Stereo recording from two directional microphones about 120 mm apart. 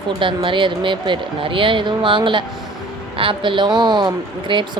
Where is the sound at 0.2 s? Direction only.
45° right (ahead or behind).